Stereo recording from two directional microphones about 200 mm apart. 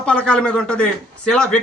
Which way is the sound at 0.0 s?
5° left (ahead or behind).